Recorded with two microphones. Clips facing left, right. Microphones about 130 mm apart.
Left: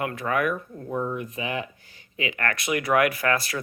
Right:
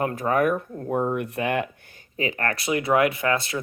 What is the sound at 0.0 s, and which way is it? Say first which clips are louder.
Speech: right 4 dB; 35° right (ahead or behind).